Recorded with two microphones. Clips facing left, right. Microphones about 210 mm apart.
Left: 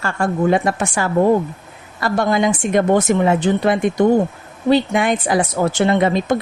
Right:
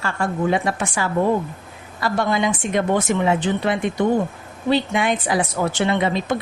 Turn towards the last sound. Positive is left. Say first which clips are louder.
# left 4 dB
turn(degrees=45)  # may be behind; listen again after turning